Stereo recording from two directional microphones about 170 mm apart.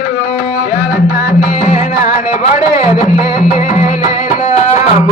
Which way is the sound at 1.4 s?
45° left (ahead or behind).